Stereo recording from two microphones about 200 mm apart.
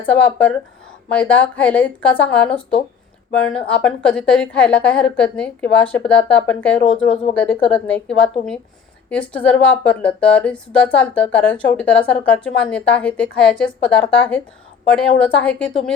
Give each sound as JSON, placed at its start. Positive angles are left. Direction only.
{"t": 0.0, "sound": "speech", "side_deg": 5}
{"t": 6.8, "sound": "speech", "side_deg": 30}
{"t": 7.3, "sound": "a woman's voice", "side_deg": 5}